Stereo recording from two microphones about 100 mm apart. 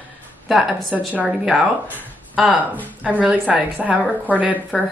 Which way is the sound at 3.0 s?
15° right (ahead or behind).